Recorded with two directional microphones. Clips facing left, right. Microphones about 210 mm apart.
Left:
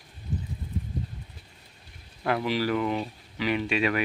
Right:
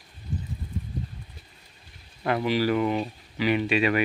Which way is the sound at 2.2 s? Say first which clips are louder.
Right 2 dB; centre (ahead or behind).